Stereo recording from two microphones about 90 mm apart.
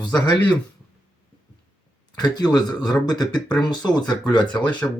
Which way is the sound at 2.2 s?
50° left (ahead or behind).